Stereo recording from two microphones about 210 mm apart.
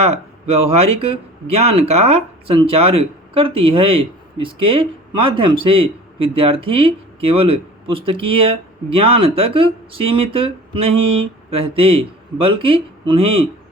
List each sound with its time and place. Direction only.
0.0 s speech: 30° right (ahead or behind)